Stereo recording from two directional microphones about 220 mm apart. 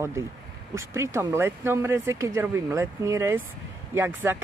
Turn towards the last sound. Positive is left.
turn(degrees=-10)  # may be behind; listen again after turning